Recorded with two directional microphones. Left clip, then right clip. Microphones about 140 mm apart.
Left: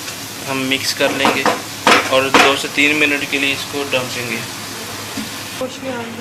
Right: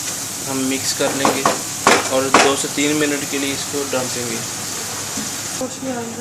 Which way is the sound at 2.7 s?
35° right (ahead or behind).